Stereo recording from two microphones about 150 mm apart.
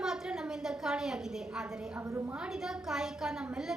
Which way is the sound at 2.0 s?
15° right (ahead or behind).